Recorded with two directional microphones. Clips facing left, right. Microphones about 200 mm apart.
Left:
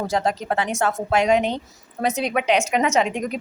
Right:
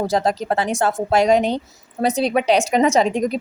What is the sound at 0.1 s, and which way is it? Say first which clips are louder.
A woman's voice: right 3 dB; 35° right (ahead or behind).